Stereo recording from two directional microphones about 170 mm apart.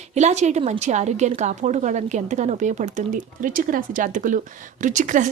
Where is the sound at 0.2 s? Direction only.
40° right (ahead or behind).